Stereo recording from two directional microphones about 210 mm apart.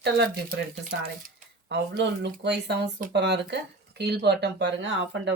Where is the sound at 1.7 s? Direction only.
55° right (ahead or behind).